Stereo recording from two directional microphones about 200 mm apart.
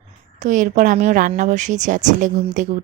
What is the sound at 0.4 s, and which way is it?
A woman's voice, 40° right (ahead or behind).